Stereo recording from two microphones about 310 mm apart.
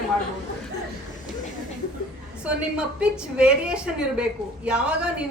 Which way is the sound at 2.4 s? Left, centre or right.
Centre.